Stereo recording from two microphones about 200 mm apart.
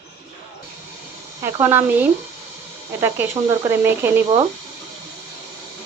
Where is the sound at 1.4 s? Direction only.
10° right (ahead or behind).